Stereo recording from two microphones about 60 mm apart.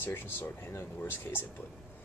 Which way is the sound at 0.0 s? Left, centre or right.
Left.